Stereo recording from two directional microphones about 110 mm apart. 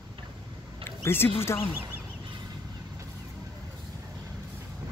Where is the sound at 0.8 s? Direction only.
20° left (ahead or behind).